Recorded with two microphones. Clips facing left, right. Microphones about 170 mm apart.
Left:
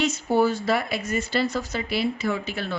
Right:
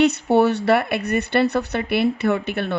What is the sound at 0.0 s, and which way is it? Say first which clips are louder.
Speech: right 5 dB; 65° right (ahead or behind).